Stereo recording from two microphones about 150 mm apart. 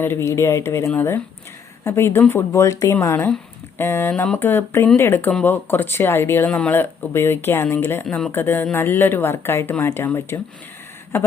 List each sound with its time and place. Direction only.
0.0 s speech: 15° left (ahead or behind)
8.0 s speech: 5° left (ahead or behind)